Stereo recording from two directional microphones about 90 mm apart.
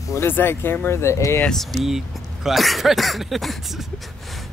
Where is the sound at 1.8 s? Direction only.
5° right (ahead or behind).